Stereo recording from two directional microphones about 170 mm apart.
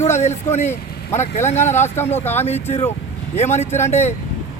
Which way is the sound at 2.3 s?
40° left (ahead or behind).